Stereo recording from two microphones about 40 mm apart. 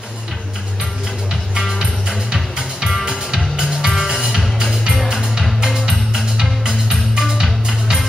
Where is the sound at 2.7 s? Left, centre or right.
Centre.